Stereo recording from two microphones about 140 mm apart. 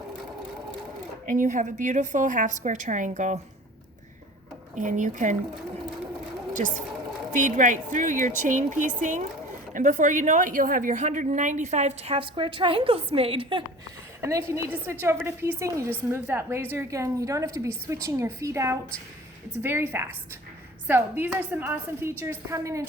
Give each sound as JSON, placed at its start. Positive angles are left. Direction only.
{"t": 1.3, "sound": "a woman's voice", "side_deg": -70}
{"t": 4.7, "sound": "a woman's voice", "side_deg": -65}
{"t": 6.5, "sound": "a woman's voice", "side_deg": -65}
{"t": 14.2, "sound": "a woman's voice", "side_deg": -20}